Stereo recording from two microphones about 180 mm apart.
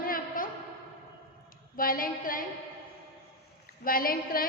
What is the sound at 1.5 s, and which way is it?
Speech, 50° left (ahead or behind).